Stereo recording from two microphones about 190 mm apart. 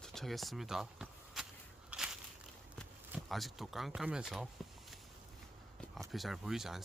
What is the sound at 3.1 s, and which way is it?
Speech, centre (ahead or behind).